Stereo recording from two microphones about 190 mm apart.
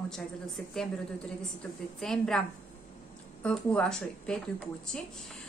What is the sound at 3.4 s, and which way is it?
A woman's voice, 5° left (ahead or behind).